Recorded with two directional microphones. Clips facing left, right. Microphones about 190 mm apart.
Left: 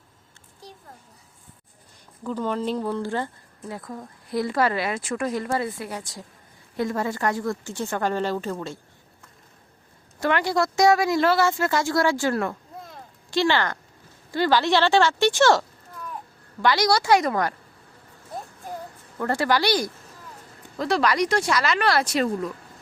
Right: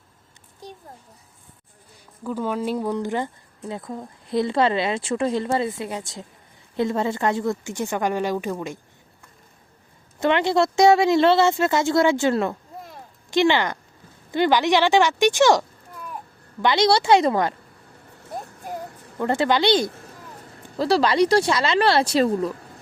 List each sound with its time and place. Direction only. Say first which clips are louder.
2.2 s a woman's voice: right 1 dB; 10° right (ahead or behind)
10.2 s a woman's voice: right 3 dB; 25° right (ahead or behind)
19.2 s speech: right 3 dB; 20° right (ahead or behind)